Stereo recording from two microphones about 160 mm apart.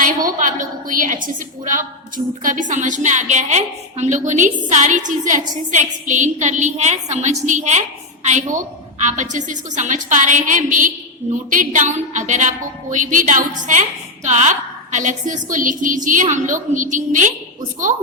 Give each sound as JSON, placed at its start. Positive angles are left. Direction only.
{"t": 0.3, "sound": "a woman's voice", "side_deg": -55}